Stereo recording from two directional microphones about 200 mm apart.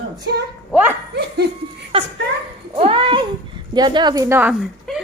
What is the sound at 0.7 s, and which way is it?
Speech, 10° right (ahead or behind).